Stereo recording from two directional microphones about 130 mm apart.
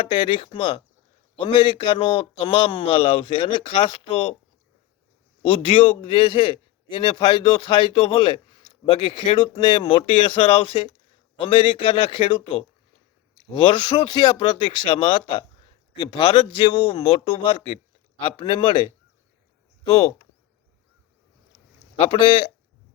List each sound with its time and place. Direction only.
0.0 s a man's voice: 40° left (ahead or behind)
5.4 s a man's voice: 40° left (ahead or behind)
21.9 s a man's voice: 40° left (ahead or behind)